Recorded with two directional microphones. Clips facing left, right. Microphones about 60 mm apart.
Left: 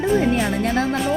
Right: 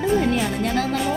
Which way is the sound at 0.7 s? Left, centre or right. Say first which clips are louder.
Left 2 dB; left.